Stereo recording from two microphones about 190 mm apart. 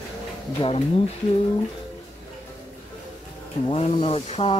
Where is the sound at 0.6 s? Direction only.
30° left (ahead or behind).